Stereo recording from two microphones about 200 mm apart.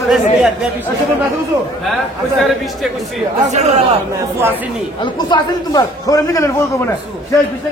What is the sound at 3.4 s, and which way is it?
Speech, 35° right (ahead or behind).